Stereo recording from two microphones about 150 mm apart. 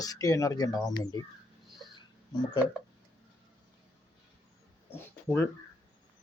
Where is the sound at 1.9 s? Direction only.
30° left (ahead or behind).